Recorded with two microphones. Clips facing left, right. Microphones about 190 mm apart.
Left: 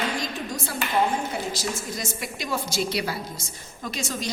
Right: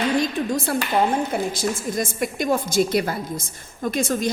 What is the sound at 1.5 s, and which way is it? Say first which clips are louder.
A woman's voice: right 6 dB; 50° right (ahead or behind).